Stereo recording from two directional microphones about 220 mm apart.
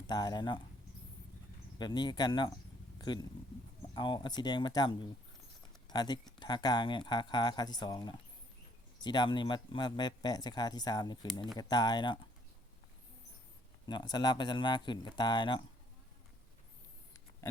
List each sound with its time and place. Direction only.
0.1 s speech: 20° left (ahead or behind)
1.8 s speech: 20° left (ahead or behind)
13.8 s speech: 20° left (ahead or behind)